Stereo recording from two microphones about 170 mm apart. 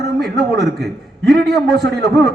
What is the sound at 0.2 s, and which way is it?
A man's voice, centre (ahead or behind).